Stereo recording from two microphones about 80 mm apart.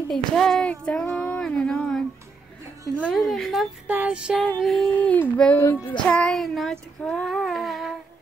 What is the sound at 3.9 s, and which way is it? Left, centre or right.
Music, centre.